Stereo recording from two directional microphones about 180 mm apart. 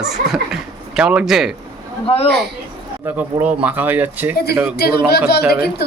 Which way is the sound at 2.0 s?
35° left (ahead or behind).